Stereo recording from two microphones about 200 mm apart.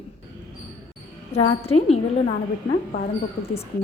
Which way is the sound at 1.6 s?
30° left (ahead or behind).